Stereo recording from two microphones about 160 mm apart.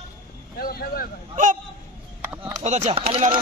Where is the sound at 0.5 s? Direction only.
70° left (ahead or behind).